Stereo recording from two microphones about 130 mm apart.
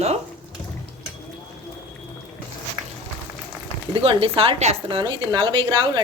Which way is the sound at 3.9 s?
45° right (ahead or behind).